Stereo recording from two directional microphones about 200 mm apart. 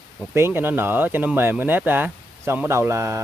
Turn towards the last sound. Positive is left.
turn(degrees=-15)  # may be behind; listen again after turning